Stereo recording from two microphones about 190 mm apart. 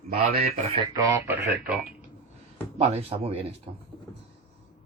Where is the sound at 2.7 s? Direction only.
35° right (ahead or behind).